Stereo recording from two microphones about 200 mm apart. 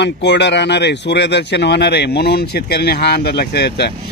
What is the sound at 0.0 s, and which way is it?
Speech, 60° left (ahead or behind).